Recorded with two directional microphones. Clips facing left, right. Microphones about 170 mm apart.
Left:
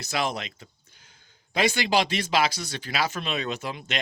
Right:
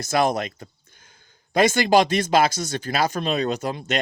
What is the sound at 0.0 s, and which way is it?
Speech, 45° right (ahead or behind).